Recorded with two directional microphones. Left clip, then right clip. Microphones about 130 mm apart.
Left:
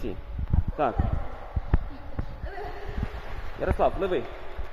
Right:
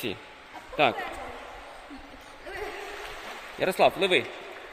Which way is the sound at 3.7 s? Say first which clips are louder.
Right 3 dB; 20° right (ahead or behind).